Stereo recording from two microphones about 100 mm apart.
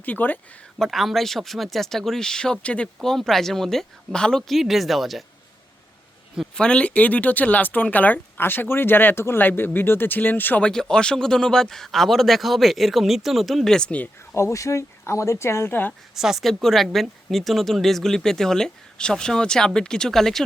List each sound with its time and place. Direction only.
0.0 s speech: 15° left (ahead or behind)
0.8 s speech: centre (ahead or behind)
6.5 s speech: 10° left (ahead or behind)
10.7 s speech: 5° left (ahead or behind)
14.3 s speech: 30° left (ahead or behind)
15.9 s speech: 5° right (ahead or behind)